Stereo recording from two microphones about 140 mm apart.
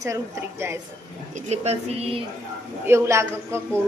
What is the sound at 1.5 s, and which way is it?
Speech, 50° right (ahead or behind).